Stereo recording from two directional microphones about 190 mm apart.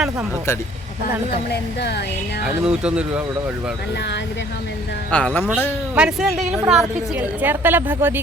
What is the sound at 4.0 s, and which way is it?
Speech, 65° left (ahead or behind).